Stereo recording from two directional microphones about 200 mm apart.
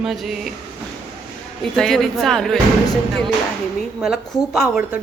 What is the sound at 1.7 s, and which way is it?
Speech, centre (ahead or behind).